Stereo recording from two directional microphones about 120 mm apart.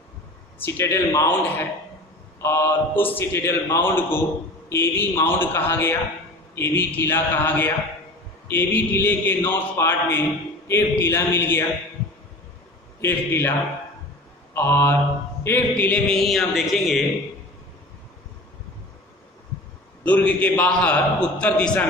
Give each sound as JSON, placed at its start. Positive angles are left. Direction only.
{"t": 0.6, "sound": "a man's voice", "side_deg": 20}
{"t": 13.0, "sound": "a man's voice", "side_deg": 20}
{"t": 20.0, "sound": "a man's voice", "side_deg": 10}